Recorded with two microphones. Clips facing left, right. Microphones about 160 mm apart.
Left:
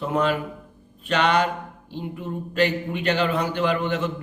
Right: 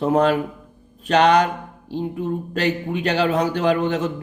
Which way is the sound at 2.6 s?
40° right (ahead or behind).